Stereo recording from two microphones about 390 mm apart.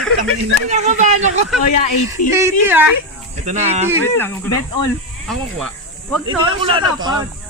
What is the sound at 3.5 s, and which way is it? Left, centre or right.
Speech, centre.